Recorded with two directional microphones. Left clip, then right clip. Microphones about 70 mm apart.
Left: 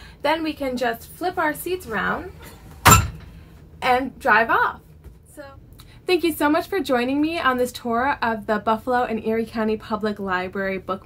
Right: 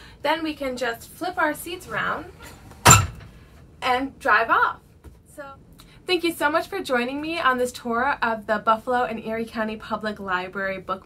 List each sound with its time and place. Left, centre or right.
0.0 s a woman's voice: left
3.8 s a woman's voice: left
6.0 s speech: left